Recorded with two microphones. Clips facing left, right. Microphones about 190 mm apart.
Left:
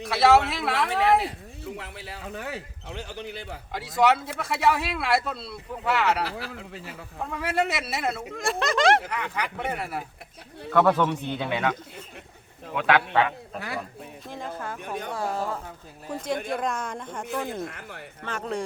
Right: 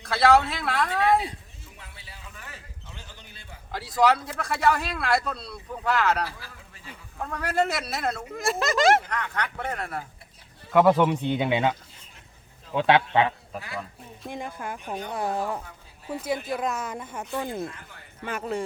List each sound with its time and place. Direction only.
0.1 s speech: centre (ahead or behind)
0.9 s speech: 70° left (ahead or behind)
3.7 s speech: centre (ahead or behind)
6.2 s speech: 75° left (ahead or behind)
7.3 s speech: centre (ahead or behind)
10.7 s speech: 15° right (ahead or behind)
12.7 s speech: 25° right (ahead or behind)
13.5 s speech: centre (ahead or behind)
14.3 s speech: 15° right (ahead or behind)
16.0 s speech: 5° right (ahead or behind)
17.7 s speech: 75° left (ahead or behind)
18.3 s speech: 5° right (ahead or behind)